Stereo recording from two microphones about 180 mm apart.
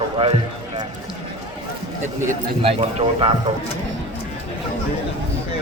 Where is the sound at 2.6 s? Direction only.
35° right (ahead or behind).